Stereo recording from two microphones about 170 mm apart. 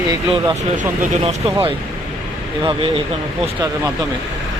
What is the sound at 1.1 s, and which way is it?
Speech, 40° right (ahead or behind).